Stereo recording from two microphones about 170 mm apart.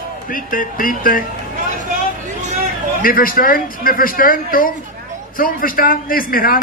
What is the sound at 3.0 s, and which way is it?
Speech, 55° left (ahead or behind).